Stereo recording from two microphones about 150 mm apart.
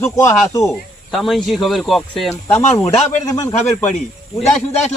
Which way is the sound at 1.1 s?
Centre (ahead or behind).